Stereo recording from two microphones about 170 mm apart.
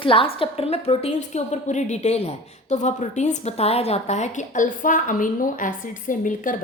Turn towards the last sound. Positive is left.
turn(degrees=50)  # may be behind; listen again after turning